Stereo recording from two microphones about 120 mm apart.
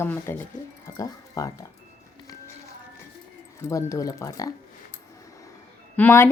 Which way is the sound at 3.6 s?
25° left (ahead or behind).